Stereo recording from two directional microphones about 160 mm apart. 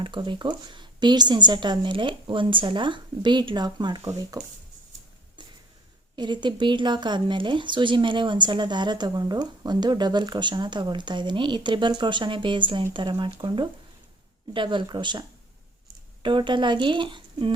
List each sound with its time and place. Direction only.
0.0 s speech: 30° right (ahead or behind)
5.4 s a sound: 30° right (ahead or behind)
6.1 s speech: 30° right (ahead or behind)